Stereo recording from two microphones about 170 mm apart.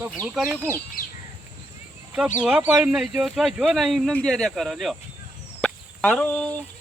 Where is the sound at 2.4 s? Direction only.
5° right (ahead or behind).